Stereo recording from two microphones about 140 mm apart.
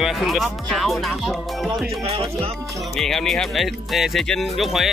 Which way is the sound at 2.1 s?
45° right (ahead or behind).